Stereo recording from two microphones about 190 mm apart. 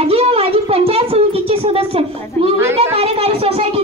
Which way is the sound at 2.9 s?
30° right (ahead or behind).